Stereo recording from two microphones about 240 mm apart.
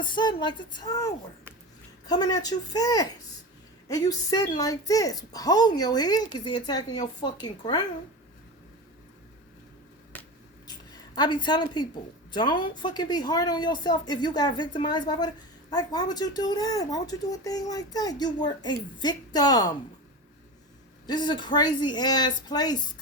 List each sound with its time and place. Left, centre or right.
0.0 s a woman's voice: centre
10.7 s a sound: centre
12.3 s speech: centre
21.1 s speech: centre